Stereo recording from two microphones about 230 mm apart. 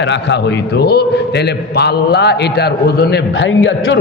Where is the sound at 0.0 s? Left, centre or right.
Left.